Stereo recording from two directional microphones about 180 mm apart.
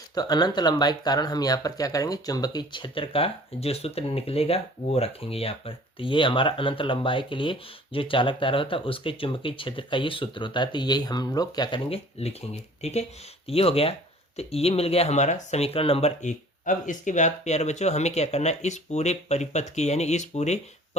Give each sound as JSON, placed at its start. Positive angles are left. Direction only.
{"t": 0.1, "sound": "speech", "side_deg": 20}